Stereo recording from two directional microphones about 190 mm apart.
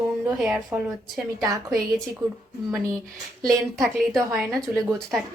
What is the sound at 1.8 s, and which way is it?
Speech, centre (ahead or behind).